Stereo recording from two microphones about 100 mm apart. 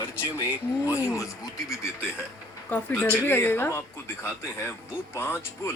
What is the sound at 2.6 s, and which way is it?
Speech, 25° left (ahead or behind).